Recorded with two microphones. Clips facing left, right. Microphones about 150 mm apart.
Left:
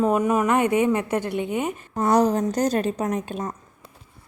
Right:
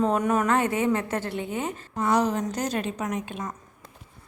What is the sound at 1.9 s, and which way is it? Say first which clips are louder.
A woman's voice: left 4 dB; 40° left (ahead or behind).